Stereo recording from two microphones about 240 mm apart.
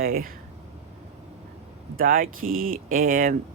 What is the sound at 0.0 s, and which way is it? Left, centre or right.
Speech, right.